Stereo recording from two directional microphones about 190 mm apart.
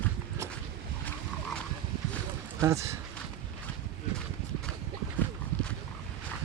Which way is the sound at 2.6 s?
15° right (ahead or behind).